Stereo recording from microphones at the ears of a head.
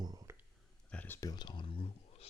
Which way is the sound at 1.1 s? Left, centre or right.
Left.